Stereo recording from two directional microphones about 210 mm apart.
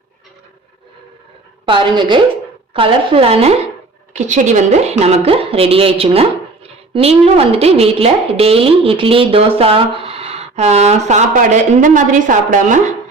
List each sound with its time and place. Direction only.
1.6 s a woman's voice: 20° right (ahead or behind)